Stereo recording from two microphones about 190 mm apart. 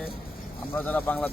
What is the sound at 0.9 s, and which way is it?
Speech, 10° left (ahead or behind).